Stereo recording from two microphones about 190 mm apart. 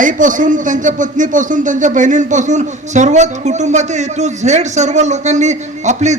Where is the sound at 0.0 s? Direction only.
45° right (ahead or behind).